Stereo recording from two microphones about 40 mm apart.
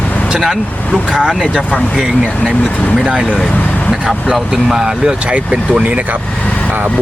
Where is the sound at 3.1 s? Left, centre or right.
Right.